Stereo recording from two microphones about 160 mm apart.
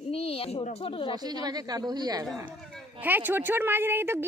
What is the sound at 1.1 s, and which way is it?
Speech, 25° right (ahead or behind).